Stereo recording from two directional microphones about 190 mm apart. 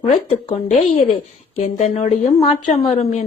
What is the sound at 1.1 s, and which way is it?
Speech, 35° left (ahead or behind).